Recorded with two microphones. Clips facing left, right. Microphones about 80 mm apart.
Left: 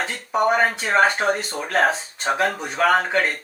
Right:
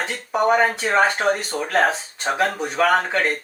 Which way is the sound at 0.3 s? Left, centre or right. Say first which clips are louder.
Right 1 dB; centre.